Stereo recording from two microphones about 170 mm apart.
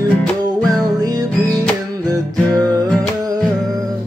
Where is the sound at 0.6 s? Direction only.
20° right (ahead or behind).